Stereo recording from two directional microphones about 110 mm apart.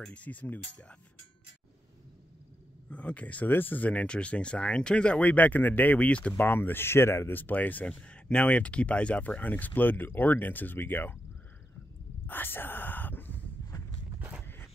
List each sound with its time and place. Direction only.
0.0 s speech: 10° left (ahead or behind)
2.9 s speech: 15° left (ahead or behind)
12.3 s a sound: 20° left (ahead or behind)